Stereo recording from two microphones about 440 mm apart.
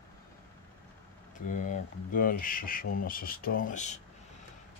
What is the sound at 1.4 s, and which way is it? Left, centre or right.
Speech, centre.